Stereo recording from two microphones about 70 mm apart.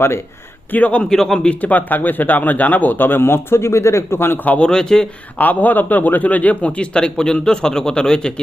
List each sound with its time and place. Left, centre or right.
0.7 s speech: left
1.1 s a man's voice: centre
1.6 s speech: left
4.4 s a man's voice: centre
5.4 s a man's voice: left